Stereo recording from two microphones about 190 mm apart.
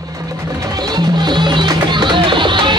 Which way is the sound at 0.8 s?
20° right (ahead or behind).